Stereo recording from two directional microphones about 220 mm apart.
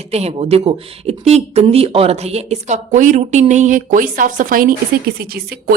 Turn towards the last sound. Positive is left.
turn(degrees=-45)  # may be behind; listen again after turning